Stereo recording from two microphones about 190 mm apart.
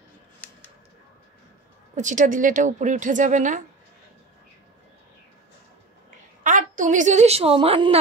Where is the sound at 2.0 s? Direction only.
40° right (ahead or behind).